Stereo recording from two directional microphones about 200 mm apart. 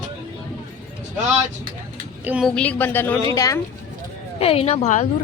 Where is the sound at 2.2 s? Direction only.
10° right (ahead or behind).